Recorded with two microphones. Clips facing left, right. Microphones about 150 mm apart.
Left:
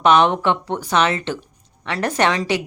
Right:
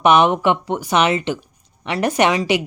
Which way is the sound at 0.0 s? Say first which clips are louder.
Right 1 dB; 10° right (ahead or behind).